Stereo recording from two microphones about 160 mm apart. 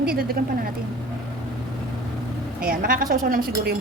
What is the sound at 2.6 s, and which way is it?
A woman's voice, 65° right (ahead or behind).